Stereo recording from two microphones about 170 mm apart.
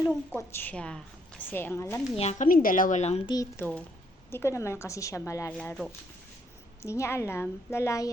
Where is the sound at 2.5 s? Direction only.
55° left (ahead or behind); by 3.2 s 40° left (ahead or behind).